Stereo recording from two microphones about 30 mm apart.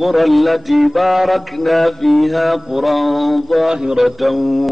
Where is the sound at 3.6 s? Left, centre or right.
Centre.